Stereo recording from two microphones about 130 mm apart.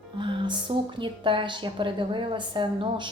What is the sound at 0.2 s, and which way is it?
A woman's voice, 40° right (ahead or behind).